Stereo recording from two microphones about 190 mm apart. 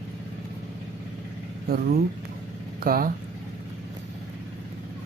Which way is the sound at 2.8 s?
50° right (ahead or behind).